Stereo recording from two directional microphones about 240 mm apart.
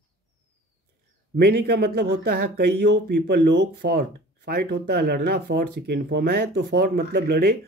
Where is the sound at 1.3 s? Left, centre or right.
Right.